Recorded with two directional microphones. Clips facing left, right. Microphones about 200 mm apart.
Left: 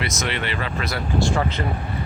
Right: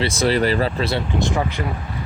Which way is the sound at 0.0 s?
30° right (ahead or behind).